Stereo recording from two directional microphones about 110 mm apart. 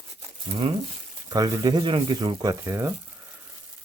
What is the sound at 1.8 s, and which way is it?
Speech, 50° right (ahead or behind).